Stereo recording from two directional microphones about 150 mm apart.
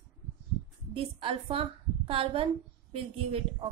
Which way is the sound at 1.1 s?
35° right (ahead or behind).